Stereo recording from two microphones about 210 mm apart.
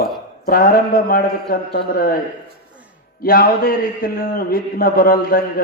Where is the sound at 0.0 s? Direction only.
45° left (ahead or behind).